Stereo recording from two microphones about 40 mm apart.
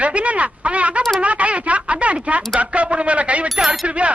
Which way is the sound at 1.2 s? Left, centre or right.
Right.